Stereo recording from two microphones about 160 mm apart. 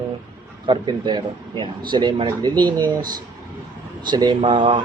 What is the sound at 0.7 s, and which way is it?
Speech, 30° right (ahead or behind).